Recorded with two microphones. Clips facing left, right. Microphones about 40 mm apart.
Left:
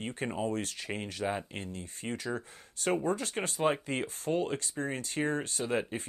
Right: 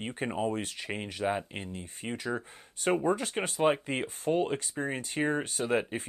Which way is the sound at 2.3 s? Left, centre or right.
Right.